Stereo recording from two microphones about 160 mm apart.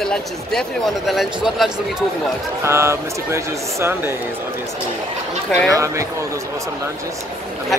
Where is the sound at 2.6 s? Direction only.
15° right (ahead or behind).